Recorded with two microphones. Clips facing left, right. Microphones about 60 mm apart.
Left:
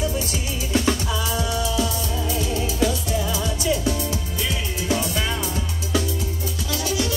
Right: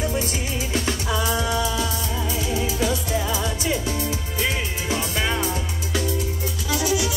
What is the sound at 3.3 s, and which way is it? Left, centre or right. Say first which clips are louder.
Music: left 1 dB; right.